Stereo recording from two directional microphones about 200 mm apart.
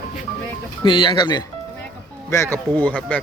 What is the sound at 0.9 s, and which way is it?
Speech, 25° left (ahead or behind).